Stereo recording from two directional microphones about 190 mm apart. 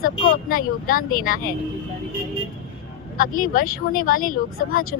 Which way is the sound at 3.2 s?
50° left (ahead or behind).